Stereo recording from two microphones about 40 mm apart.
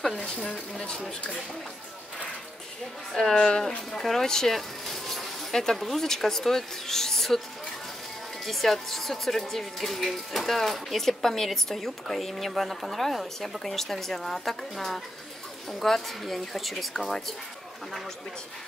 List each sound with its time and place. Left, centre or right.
0.2 s speech: left
3.3 s speech: centre
5.8 s speech: centre
8.5 s speech: centre